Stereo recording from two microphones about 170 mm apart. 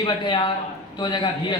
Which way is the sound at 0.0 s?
25° left (ahead or behind).